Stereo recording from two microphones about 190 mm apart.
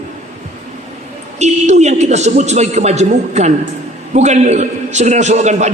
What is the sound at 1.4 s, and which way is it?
A man's voice, 35° right (ahead or behind).